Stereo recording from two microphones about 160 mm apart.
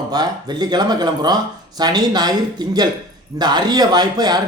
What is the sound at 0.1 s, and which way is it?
A man's voice, 25° right (ahead or behind).